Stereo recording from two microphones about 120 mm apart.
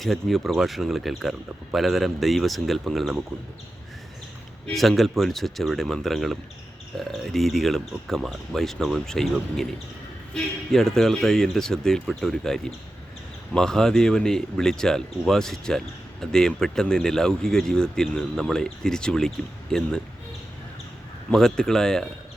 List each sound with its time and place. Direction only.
0.0 s speech: centre (ahead or behind)
4.6 s speech: centre (ahead or behind)
10.3 s speech: 5° left (ahead or behind)
21.2 s speech: 5° left (ahead or behind)